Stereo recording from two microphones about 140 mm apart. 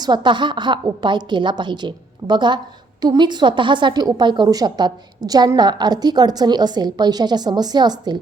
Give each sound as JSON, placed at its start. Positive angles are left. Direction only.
{"t": 0.0, "sound": "a woman's voice", "side_deg": -30}